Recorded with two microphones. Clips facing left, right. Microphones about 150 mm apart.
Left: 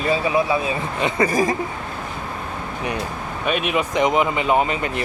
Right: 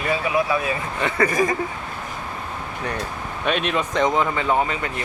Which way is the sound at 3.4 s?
5° left (ahead or behind).